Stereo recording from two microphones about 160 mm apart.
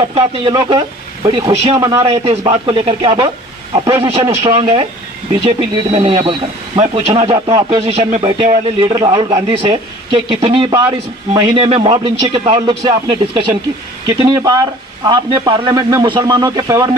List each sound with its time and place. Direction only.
0.1 s speech: 35° right (ahead or behind)
5.3 s speech: 30° right (ahead or behind)